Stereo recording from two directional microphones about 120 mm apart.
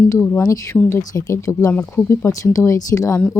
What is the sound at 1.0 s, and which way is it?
Speech, 30° left (ahead or behind).